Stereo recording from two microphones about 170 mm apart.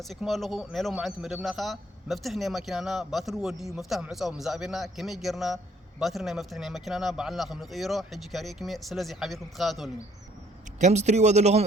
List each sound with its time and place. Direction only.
0.0 s speech: centre (ahead or behind)
10.8 s speech: 45° right (ahead or behind)